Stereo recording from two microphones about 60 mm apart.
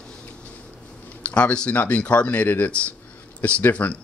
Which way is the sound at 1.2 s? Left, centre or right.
Centre.